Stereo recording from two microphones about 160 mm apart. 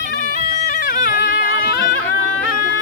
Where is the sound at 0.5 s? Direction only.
50° left (ahead or behind); by 1.9 s 65° left (ahead or behind).